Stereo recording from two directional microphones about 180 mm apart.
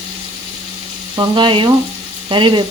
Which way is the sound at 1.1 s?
25° right (ahead or behind).